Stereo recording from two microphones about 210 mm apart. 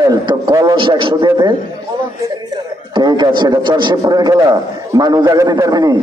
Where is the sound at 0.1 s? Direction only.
20° right (ahead or behind).